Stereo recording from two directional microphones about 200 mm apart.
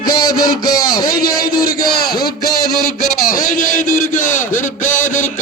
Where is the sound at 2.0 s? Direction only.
50° left (ahead or behind).